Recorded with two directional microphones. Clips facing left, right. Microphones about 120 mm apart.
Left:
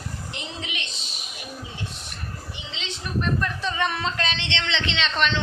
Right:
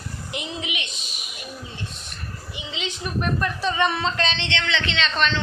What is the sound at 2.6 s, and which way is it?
A woman's voice, 10° right (ahead or behind).